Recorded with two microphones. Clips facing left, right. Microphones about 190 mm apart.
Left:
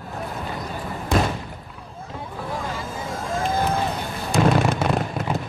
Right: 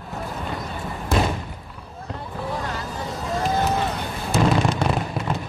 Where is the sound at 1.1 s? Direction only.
Centre (ahead or behind).